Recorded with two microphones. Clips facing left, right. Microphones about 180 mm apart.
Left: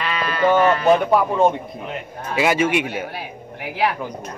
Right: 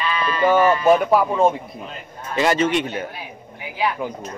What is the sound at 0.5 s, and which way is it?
Speech, 10° right (ahead or behind).